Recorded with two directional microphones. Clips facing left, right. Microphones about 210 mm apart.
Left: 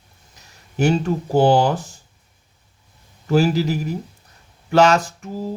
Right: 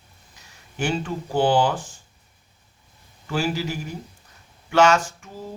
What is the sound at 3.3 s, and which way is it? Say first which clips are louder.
Speech: left 8 dB; 40° left (ahead or behind).